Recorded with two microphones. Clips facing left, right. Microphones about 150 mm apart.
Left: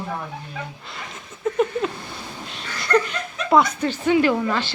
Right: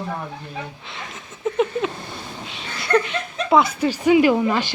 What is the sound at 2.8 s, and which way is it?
Speech, 5° right (ahead or behind).